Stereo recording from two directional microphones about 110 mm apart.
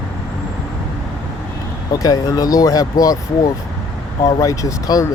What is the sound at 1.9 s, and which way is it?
Speech, 35° left (ahead or behind).